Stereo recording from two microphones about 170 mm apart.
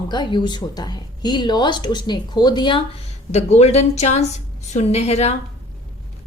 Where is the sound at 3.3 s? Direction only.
40° left (ahead or behind).